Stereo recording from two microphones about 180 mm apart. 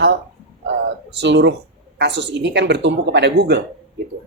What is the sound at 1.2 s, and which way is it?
Speech, 75° right (ahead or behind).